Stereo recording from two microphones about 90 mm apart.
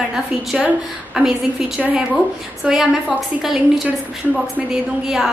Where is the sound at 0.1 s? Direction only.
5° right (ahead or behind).